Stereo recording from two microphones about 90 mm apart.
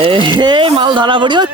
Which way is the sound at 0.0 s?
65° right (ahead or behind).